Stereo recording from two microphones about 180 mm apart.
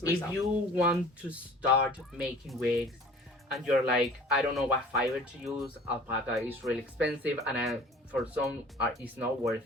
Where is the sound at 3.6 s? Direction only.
Centre (ahead or behind).